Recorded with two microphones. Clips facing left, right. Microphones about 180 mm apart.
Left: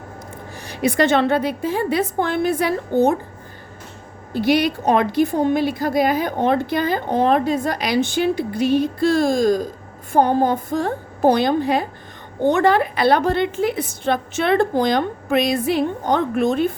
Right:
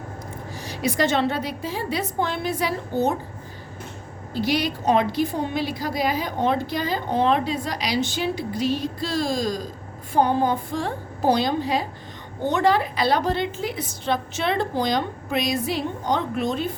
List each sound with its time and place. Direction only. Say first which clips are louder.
0.5 s a woman's voice: left 5 dB; 55° left (ahead or behind)
4.4 s a woman's voice: left 6 dB; 55° left (ahead or behind)